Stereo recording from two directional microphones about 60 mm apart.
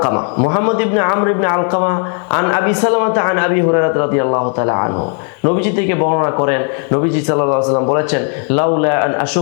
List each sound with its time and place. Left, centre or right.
0.0 s a man's voice: left